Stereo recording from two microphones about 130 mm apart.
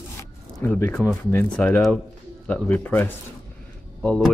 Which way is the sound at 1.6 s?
10° left (ahead or behind).